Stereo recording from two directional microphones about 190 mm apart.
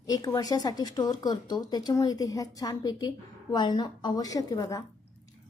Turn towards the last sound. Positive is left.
turn(degrees=20)  # may be behind; listen again after turning